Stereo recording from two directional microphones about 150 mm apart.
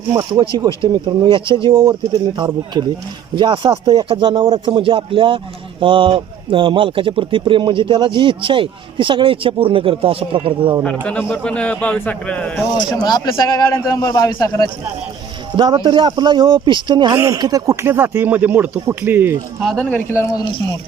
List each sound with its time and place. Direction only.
0.1 s speech: 30° right (ahead or behind)
11.0 s speech: 10° left (ahead or behind)
12.9 s a man's voice: 25° left (ahead or behind)
15.5 s speech: 30° right (ahead or behind)
19.6 s speech: 5° left (ahead or behind)
20.1 s a man's voice: 20° left (ahead or behind)